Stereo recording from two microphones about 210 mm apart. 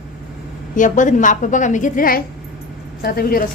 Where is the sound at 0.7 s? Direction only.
35° left (ahead or behind).